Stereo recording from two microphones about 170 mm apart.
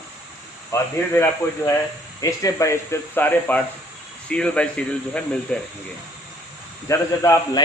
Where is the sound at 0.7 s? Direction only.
15° left (ahead or behind).